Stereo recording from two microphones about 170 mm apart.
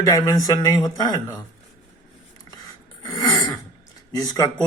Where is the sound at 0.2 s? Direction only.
20° left (ahead or behind).